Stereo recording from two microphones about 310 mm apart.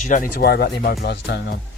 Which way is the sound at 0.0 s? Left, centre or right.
Left.